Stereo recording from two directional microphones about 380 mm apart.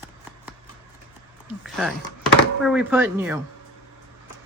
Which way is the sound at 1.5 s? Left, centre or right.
Centre.